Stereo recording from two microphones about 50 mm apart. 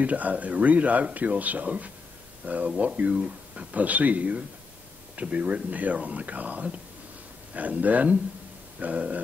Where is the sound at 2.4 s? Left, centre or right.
Right.